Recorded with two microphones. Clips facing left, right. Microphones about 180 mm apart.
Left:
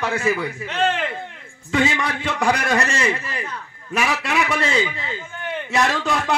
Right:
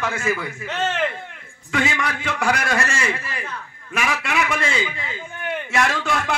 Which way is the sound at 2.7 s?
35° left (ahead or behind).